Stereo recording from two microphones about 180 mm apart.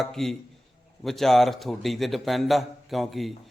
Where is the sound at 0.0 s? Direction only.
Centre (ahead or behind).